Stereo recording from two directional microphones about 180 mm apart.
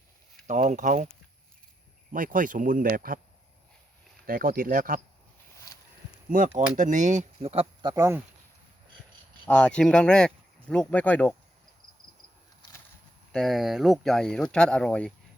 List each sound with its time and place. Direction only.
0.4 s speech: 45° right (ahead or behind)
2.1 s speech: 50° right (ahead or behind)
4.3 s speech: 50° right (ahead or behind)
6.6 s speech: 45° right (ahead or behind); by 8.2 s 15° right (ahead or behind)
9.5 s speech: 5° left (ahead or behind)
13.3 s speech: centre (ahead or behind)